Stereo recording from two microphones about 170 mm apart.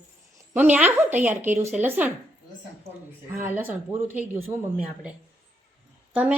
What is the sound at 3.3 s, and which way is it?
Speech, 10° right (ahead or behind).